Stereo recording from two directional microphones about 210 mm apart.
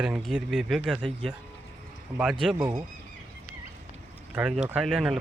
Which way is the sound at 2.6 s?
15° right (ahead or behind).